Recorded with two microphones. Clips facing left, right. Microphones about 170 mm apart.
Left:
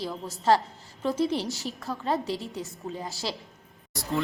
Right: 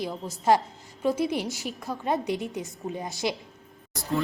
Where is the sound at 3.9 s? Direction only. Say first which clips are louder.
Right 1 dB; centre (ahead or behind).